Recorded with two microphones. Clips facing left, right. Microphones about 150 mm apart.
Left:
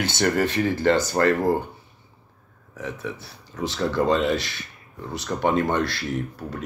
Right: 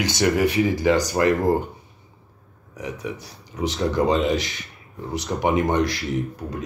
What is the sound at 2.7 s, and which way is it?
Speech, 15° right (ahead or behind).